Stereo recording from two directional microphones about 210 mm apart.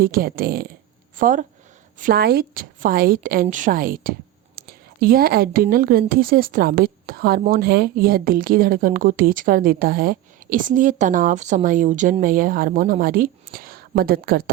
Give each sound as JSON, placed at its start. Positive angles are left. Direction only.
{"t": 0.0, "sound": "a woman's voice", "side_deg": -45}
{"t": 4.5, "sound": "a sound", "side_deg": -45}
{"t": 5.6, "sound": "a woman's voice", "side_deg": -45}